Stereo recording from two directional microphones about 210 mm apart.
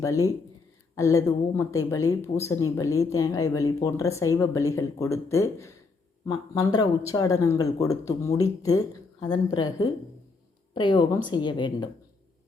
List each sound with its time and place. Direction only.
0.0 s a woman's voice: 15° left (ahead or behind)